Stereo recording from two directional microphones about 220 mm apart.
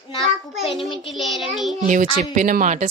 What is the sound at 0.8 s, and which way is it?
Speech, centre (ahead or behind).